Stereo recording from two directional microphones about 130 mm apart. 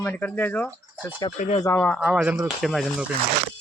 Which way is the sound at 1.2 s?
40° left (ahead or behind).